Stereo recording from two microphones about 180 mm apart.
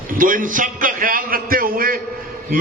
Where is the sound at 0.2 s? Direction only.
50° right (ahead or behind).